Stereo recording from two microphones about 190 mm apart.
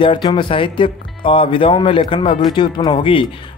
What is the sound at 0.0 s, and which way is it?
Speech, 25° left (ahead or behind).